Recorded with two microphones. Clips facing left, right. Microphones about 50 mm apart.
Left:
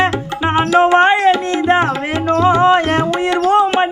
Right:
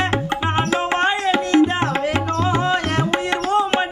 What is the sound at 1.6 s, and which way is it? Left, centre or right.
Music, left.